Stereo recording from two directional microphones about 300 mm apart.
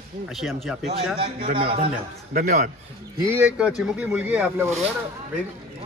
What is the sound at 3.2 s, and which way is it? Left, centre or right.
A man's voice, centre.